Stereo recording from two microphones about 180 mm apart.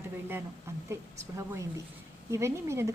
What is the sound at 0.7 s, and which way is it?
Speech, 15° right (ahead or behind).